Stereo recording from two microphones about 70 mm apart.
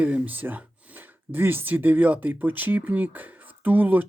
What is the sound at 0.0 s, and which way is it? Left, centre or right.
Speech, right.